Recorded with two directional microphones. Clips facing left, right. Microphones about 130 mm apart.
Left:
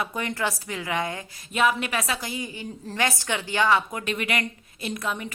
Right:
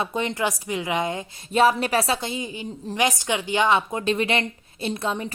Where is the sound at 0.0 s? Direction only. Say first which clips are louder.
Right 3 dB; 25° right (ahead or behind).